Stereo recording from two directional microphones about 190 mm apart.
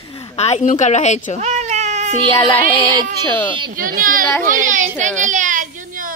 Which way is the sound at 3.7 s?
50° right (ahead or behind).